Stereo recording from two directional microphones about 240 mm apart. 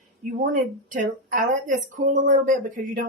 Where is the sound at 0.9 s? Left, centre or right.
Right.